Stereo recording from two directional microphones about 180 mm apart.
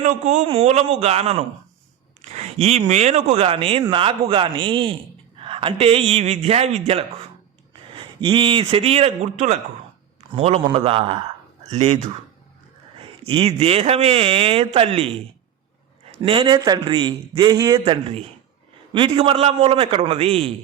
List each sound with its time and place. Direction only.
0.0 s a man's voice: 35° right (ahead or behind)
16.2 s a man's voice: 30° right (ahead or behind)